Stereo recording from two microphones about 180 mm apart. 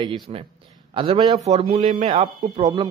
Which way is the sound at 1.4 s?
35° right (ahead or behind).